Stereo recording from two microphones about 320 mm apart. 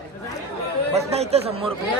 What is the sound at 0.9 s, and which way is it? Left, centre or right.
Speech, centre.